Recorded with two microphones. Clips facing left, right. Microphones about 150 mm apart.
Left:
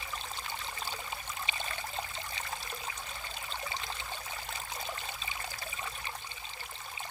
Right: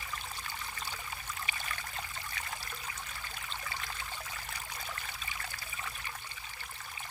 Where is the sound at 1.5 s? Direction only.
20° left (ahead or behind).